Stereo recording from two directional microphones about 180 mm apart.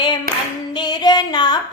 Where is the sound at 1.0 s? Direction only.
25° left (ahead or behind).